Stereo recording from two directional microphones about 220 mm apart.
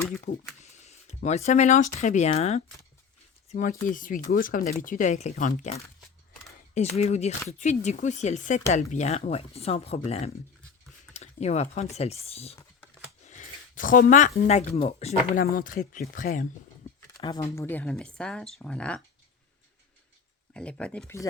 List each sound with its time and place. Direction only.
0.3 s speech: 30° left (ahead or behind)
17.2 s speech: 20° left (ahead or behind)
17.5 s speech: 10° left (ahead or behind)
20.5 s speech: 5° left (ahead or behind)